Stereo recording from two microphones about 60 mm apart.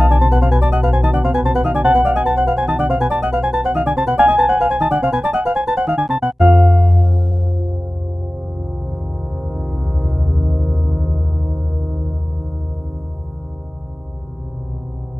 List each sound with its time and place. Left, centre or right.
0.1 s music: centre
0.5 s music: centre
3.3 s music: centre
8.9 s music: centre
11.1 s gong: centre